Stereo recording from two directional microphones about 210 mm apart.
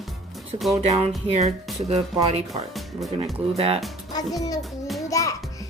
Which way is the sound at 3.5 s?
30° right (ahead or behind).